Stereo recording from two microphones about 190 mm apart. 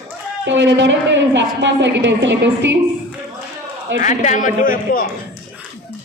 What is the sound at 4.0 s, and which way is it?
A man's voice, 40° left (ahead or behind).